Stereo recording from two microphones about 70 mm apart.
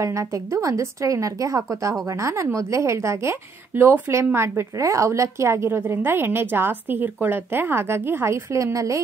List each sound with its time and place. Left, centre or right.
0.0 s a woman's voice: right